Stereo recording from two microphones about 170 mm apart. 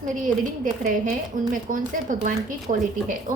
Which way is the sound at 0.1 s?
50° right (ahead or behind).